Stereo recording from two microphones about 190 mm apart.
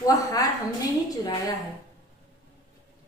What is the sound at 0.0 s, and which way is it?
Speech, 20° left (ahead or behind).